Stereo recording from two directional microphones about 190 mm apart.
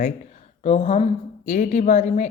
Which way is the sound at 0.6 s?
35° left (ahead or behind).